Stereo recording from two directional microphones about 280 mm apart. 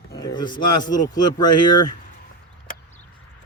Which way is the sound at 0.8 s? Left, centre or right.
Centre.